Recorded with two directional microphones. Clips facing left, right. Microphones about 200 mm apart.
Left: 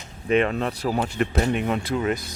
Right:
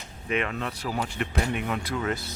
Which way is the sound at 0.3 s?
30° left (ahead or behind).